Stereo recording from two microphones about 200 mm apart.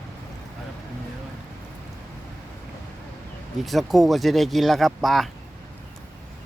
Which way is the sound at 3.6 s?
Centre (ahead or behind).